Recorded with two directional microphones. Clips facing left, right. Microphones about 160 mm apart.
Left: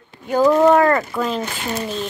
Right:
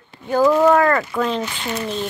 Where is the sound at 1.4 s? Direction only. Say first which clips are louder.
Left 1 dB; 45° left (ahead or behind).